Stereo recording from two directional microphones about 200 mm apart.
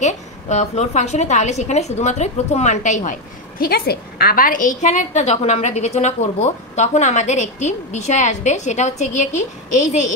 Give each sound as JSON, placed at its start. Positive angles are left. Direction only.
{"t": 0.0, "sound": "a woman's voice", "side_deg": 35}